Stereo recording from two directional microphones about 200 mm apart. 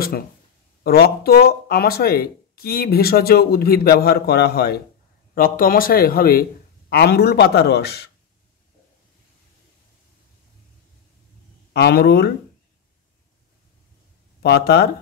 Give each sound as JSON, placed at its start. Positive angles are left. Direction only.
{"t": 0.8, "sound": "a man's voice", "side_deg": 50}
{"t": 11.7, "sound": "a man's voice", "side_deg": 55}
{"t": 14.4, "sound": "a man's voice", "side_deg": 55}